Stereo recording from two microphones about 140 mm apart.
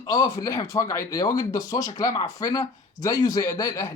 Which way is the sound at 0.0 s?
30° left (ahead or behind).